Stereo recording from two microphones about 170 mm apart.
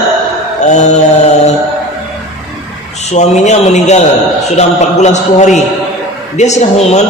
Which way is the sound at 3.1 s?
40° left (ahead or behind).